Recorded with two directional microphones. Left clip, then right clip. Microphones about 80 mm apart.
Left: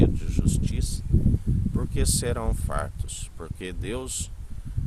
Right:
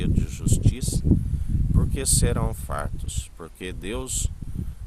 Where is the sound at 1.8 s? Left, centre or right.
Right.